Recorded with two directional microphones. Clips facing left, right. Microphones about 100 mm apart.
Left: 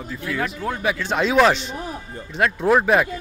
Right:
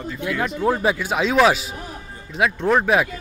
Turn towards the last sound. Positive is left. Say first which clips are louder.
# left 1 dB
turn(degrees=0)  # may be behind; listen again after turning